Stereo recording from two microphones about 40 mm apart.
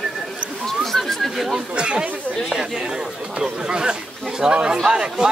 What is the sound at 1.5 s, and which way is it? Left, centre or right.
Speech, right.